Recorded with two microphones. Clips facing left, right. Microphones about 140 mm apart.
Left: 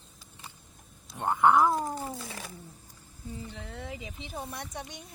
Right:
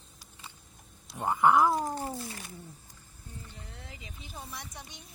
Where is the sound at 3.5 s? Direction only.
75° left (ahead or behind).